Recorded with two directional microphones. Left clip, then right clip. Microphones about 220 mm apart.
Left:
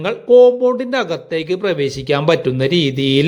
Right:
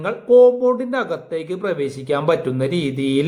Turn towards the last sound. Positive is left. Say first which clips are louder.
# left 5 dB
turn(degrees=20)  # may be behind; listen again after turning